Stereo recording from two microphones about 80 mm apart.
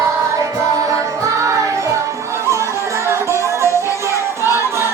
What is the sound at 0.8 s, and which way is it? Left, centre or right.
Music, right.